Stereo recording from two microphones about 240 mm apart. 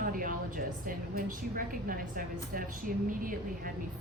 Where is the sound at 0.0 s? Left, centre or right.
Right.